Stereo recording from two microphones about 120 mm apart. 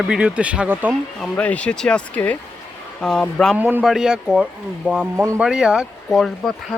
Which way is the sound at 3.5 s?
15° right (ahead or behind).